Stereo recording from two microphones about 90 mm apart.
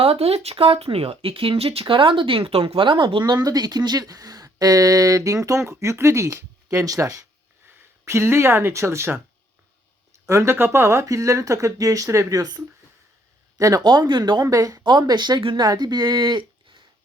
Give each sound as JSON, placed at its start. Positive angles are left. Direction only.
{"t": 0.0, "sound": "speech", "side_deg": -90}
{"t": 10.2, "sound": "speech", "side_deg": -30}
{"t": 14.4, "sound": "speech", "side_deg": -40}
{"t": 14.8, "sound": "speech", "side_deg": -55}
{"t": 15.6, "sound": "speech", "side_deg": -45}